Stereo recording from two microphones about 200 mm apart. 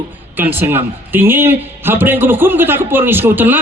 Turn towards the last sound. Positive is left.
turn(degrees=-10)  # may be behind; listen again after turning